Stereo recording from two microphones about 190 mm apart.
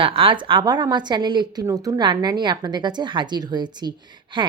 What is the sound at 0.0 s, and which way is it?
Speech, 30° right (ahead or behind).